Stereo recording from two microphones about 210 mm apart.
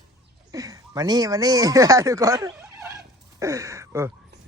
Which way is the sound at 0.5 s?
15° right (ahead or behind).